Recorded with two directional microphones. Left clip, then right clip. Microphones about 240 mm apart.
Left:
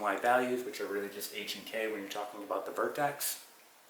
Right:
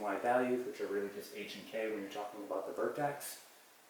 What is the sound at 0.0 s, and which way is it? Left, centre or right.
Speech, centre.